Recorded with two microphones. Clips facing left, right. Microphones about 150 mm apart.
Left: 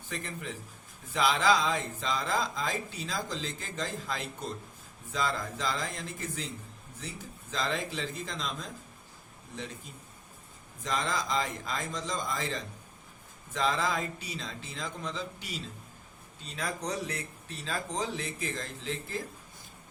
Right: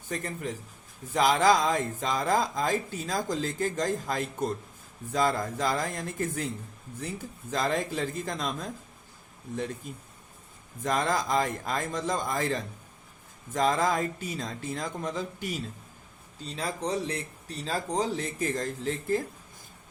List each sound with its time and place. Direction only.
0.1 s speech: 45° right (ahead or behind)
7.5 s speech: 50° right (ahead or behind)
10.8 s speech: 55° right (ahead or behind)
16.6 s speech: 30° right (ahead or behind); by 19.2 s 45° right (ahead or behind)